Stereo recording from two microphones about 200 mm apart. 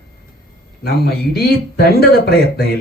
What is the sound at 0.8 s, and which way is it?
Speech, 55° left (ahead or behind).